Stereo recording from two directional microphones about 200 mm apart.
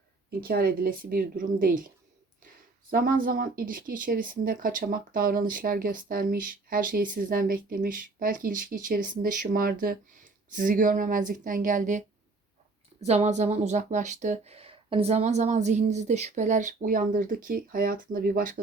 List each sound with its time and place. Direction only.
0.4 s speech: 50° right (ahead or behind)
2.9 s speech: 45° right (ahead or behind)